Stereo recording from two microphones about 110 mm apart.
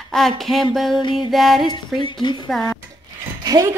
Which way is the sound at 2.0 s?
45° left (ahead or behind).